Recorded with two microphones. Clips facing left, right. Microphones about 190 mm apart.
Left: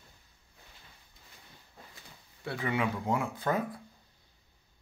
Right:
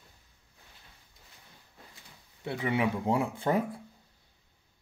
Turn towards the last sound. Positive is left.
turn(degrees=-25)  # may be behind; listen again after turning